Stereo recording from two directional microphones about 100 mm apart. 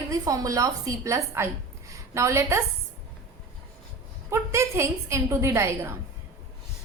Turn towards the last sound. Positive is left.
turn(degrees=-25)  # may be behind; listen again after turning